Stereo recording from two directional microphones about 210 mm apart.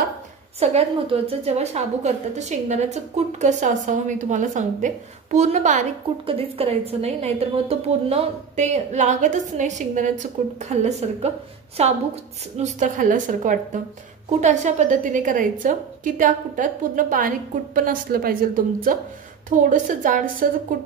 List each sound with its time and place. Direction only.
0.6 s a woman's voice: 30° right (ahead or behind)